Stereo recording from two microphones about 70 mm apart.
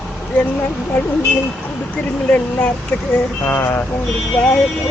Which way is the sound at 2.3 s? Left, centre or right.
Centre.